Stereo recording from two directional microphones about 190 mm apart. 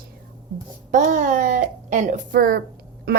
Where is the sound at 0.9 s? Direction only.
40° right (ahead or behind).